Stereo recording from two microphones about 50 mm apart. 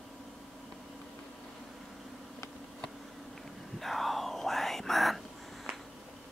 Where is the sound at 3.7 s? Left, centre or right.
Centre.